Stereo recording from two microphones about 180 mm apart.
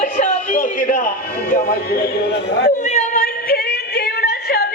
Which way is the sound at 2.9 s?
50° left (ahead or behind).